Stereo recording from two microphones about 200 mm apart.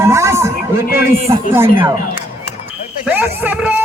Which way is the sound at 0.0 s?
15° right (ahead or behind).